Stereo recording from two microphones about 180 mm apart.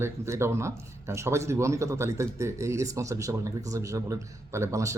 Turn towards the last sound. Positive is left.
turn(degrees=-15)  # may be behind; listen again after turning